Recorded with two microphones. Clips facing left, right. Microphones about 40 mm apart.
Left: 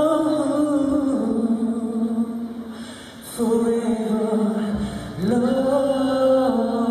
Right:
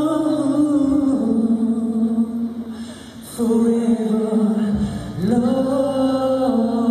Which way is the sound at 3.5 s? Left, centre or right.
Left.